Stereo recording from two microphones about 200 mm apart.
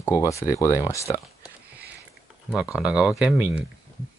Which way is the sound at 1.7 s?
10° right (ahead or behind).